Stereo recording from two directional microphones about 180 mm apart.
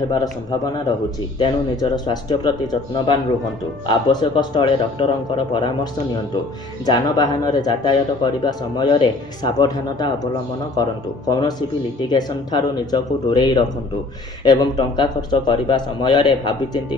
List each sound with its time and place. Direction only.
0.1 s speech: 20° left (ahead or behind)
6.9 s speech: 20° left (ahead or behind)